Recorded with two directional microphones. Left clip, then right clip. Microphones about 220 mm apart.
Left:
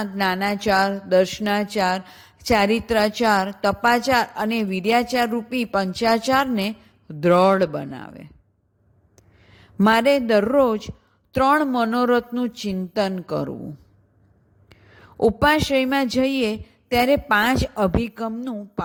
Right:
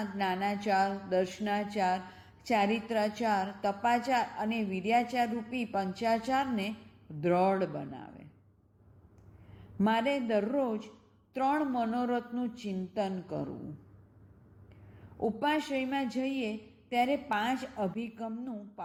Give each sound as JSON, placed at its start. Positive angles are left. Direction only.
{"t": 0.0, "sound": "a woman's voice", "side_deg": 50}
{"t": 9.5, "sound": "a woman's voice", "side_deg": 50}
{"t": 14.7, "sound": "a woman's voice", "side_deg": 50}